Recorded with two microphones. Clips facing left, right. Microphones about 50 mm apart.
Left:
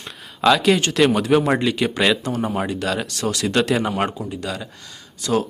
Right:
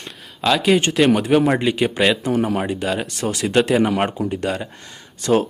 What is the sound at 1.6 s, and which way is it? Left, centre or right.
Speech, centre.